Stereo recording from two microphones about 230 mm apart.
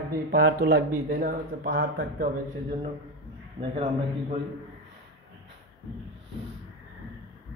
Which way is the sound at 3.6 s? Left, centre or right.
Right.